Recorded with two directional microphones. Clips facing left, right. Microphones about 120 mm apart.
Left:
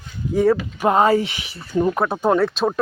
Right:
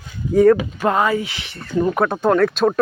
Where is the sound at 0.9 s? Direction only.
30° left (ahead or behind).